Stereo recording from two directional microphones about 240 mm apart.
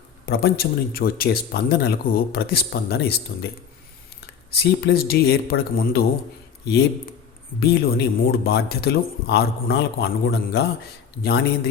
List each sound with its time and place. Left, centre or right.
0.3 s speech: left
4.8 s speech: left